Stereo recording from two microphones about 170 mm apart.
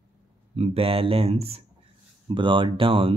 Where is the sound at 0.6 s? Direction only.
35° right (ahead or behind).